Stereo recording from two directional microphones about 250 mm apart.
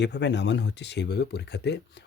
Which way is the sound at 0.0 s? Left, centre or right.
Left.